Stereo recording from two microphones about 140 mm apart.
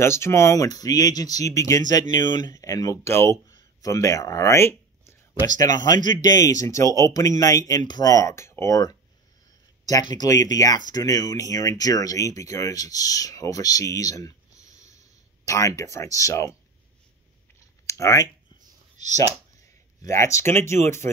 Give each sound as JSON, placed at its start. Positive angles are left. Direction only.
{"t": 0.0, "sound": "speech", "side_deg": 20}
{"t": 5.9, "sound": "a man's voice", "side_deg": -65}
{"t": 6.3, "sound": "speech", "side_deg": 25}
{"t": 14.5, "sound": "a sound", "side_deg": -55}
{"t": 15.4, "sound": "speech", "side_deg": 25}
{"t": 17.8, "sound": "speech", "side_deg": 20}
{"t": 20.0, "sound": "speech", "side_deg": 20}